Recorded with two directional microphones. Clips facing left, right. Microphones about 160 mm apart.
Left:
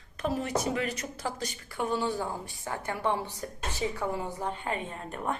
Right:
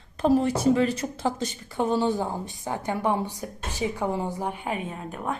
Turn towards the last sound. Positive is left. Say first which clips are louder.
# right 2 dB
turn(degrees=0)  # may be behind; listen again after turning